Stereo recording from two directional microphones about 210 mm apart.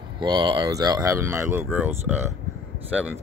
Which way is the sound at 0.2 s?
20° right (ahead or behind).